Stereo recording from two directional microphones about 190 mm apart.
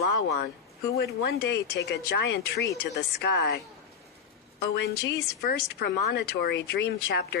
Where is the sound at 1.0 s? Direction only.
55° left (ahead or behind).